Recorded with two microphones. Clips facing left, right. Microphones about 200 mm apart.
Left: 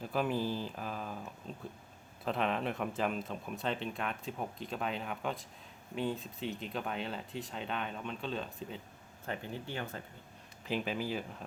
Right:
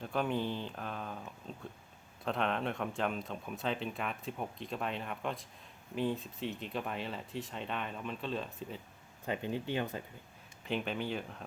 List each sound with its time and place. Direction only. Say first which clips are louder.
0.0 s speech: left 1 dB; 5° left (ahead or behind)
9.2 s speech: right 4 dB; 15° right (ahead or behind)
10.7 s speech: even; centre (ahead or behind)